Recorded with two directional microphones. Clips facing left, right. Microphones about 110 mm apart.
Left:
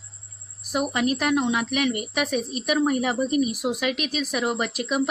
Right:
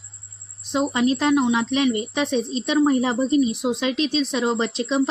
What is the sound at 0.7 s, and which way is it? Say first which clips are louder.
A woman's voice: right 3 dB; 25° right (ahead or behind).